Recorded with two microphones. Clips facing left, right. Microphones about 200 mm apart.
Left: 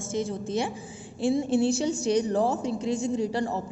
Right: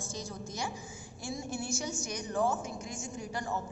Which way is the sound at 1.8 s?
35° left (ahead or behind).